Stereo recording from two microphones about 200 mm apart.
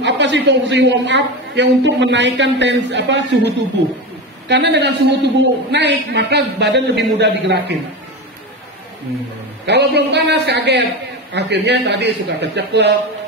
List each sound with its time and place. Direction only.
0.0 s a man's voice: 65° right (ahead or behind)
9.7 s a man's voice: 60° right (ahead or behind)